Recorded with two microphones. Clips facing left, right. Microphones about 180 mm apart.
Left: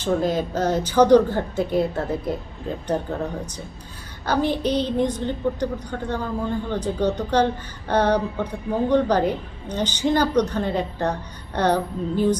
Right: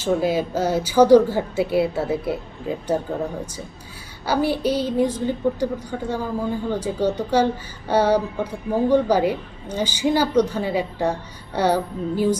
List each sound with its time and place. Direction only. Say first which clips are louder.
0.0 s a woman's voice: right 1 dB; 10° right (ahead or behind)
4.3 s a woman's voice: right 1 dB; 10° right (ahead or behind)